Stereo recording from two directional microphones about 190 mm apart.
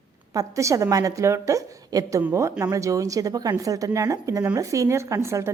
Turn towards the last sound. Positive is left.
turn(degrees=-15)  # may be behind; listen again after turning